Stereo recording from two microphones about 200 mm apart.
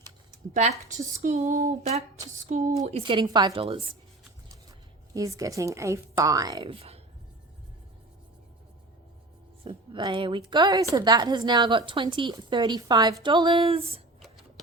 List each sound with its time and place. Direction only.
1.2 s a woman's voice: 40° right (ahead or behind)
5.1 s a woman's voice: 15° right (ahead or behind)
9.6 s a woman's voice: 25° right (ahead or behind)
14.2 s a sound: centre (ahead or behind)